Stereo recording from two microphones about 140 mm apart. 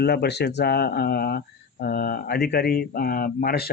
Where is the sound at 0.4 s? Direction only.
90° left.